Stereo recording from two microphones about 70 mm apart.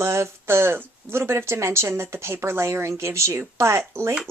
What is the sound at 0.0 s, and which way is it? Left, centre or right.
Speech, right.